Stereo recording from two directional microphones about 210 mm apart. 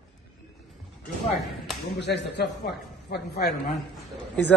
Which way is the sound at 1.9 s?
55° left (ahead or behind).